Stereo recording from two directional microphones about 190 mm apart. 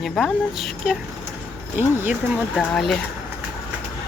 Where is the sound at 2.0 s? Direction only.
Centre (ahead or behind).